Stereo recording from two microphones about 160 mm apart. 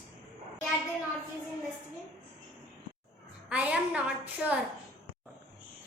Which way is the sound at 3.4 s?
10° right (ahead or behind).